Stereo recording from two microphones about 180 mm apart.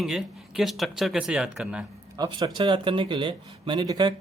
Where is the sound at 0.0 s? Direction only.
Centre (ahead or behind).